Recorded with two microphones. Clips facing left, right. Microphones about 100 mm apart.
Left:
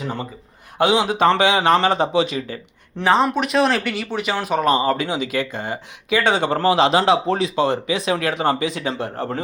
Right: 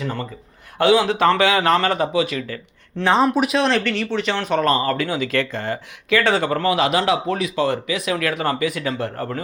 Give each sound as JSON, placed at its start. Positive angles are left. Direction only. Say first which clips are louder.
{"t": 0.0, "sound": "a man's voice", "louder": "right 1 dB", "side_deg": 20}
{"t": 3.0, "sound": "speech", "louder": "even", "side_deg": 0}